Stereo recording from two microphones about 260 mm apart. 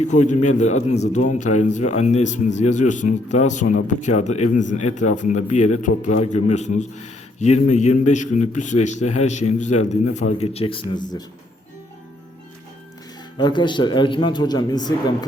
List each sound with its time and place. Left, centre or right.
0.0 s a man's voice: left
13.4 s a man's voice: centre